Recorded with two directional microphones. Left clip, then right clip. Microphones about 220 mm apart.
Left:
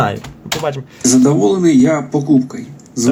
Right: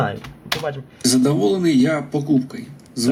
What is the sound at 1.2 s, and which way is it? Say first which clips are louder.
Speech: left 6 dB; 10° right (ahead or behind).